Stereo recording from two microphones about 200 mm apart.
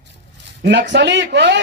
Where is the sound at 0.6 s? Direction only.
60° right (ahead or behind).